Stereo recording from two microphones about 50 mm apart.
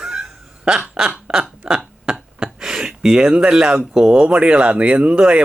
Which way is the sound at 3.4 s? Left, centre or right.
Right.